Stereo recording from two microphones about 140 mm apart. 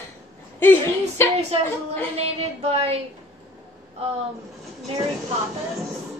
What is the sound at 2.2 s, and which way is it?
Speech, 45° right (ahead or behind).